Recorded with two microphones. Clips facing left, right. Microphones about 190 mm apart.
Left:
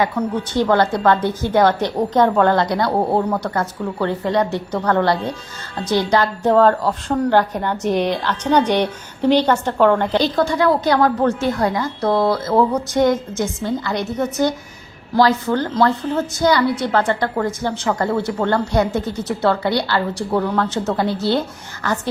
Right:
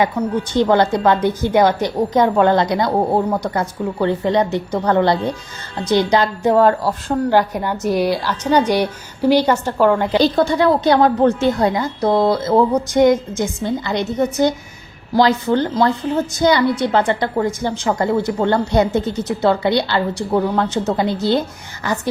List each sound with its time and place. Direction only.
0.2 s a woman's voice: 10° right (ahead or behind)
10.3 s a woman's voice: 25° right (ahead or behind)